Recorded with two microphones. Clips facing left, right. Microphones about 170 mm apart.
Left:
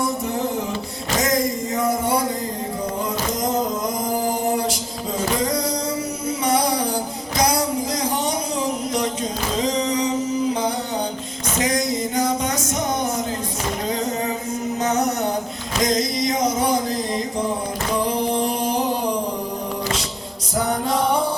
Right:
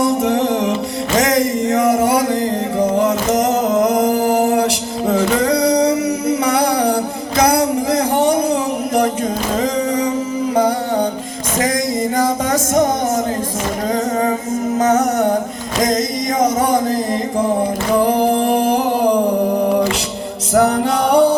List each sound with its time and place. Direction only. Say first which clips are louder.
0.0 s music: right 8 dB; 80° right
1.1 s a sound: right 5 dB; 75° right (ahead or behind)
2.7 s music: right 11 dB; 80° right; by 8.5 s 55° right (ahead or behind)
9.6 s music: right 2 dB; 50° right (ahead or behind)
15.8 s music: right 3 dB; 50° right (ahead or behind)
18.0 s music: right 6 dB; 65° right (ahead or behind); by 21.3 s 80° right